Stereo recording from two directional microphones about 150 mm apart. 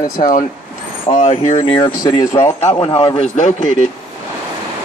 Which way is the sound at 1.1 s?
50° left (ahead or behind).